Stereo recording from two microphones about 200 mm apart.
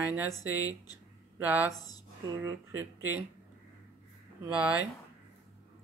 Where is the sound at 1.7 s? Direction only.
20° left (ahead or behind).